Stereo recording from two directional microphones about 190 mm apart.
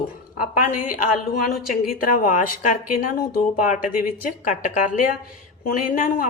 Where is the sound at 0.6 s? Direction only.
45° left (ahead or behind).